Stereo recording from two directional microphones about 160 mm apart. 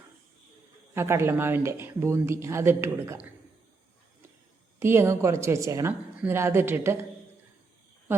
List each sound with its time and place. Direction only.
0.9 s speech: 15° right (ahead or behind)
4.8 s speech: 15° right (ahead or behind)